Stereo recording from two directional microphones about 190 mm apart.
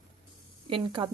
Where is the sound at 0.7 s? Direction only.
25° right (ahead or behind).